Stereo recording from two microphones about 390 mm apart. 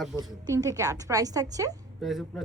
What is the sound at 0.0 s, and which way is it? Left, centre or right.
A woman's voice, centre.